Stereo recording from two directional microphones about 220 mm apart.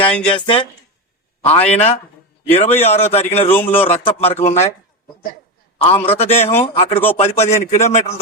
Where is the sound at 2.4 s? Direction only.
30° left (ahead or behind).